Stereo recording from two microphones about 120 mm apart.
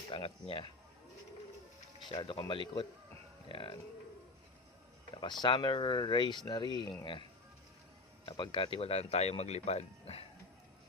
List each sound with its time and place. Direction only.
0.1 s speech: 50° left (ahead or behind)
2.0 s speech: 45° left (ahead or behind)
3.5 s speech: 45° left (ahead or behind)
5.2 s speech: 40° left (ahead or behind); by 10.2 s 60° left (ahead or behind)